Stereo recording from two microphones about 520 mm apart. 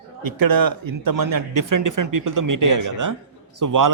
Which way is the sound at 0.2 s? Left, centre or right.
Right.